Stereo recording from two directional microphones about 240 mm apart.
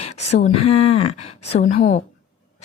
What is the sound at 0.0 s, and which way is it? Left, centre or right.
A woman's voice, left.